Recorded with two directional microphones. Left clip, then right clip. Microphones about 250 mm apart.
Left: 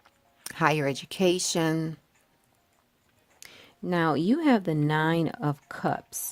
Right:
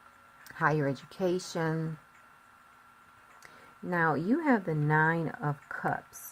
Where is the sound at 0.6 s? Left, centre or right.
Left.